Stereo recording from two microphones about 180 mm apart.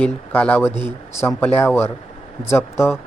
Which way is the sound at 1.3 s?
10° left (ahead or behind).